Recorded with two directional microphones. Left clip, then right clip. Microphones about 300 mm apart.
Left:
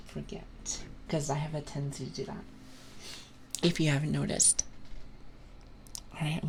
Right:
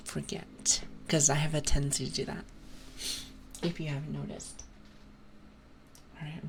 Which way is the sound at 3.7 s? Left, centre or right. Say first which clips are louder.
Left 9 dB; left.